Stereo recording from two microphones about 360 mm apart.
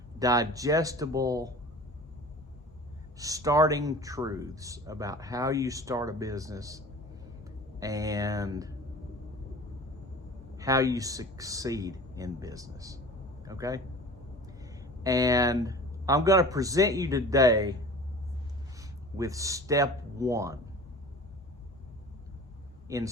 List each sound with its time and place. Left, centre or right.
0.2 s speech: centre
3.2 s speech: centre
10.6 s speech: centre
18.8 s speech: centre
22.9 s speech: centre